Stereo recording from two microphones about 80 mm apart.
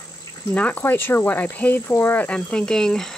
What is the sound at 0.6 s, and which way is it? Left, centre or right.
Speech, centre.